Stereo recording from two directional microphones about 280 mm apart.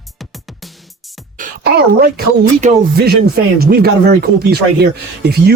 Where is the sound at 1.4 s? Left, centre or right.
Right.